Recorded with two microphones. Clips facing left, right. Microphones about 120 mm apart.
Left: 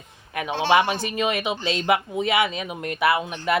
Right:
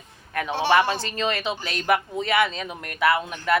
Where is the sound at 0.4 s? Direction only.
15° left (ahead or behind).